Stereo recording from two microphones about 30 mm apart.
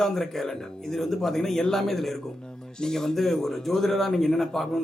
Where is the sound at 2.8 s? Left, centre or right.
Centre.